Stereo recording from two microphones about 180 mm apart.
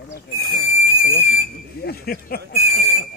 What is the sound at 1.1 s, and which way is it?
Speech, 40° left (ahead or behind).